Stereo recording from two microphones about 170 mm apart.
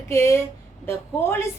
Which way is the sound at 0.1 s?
15° left (ahead or behind).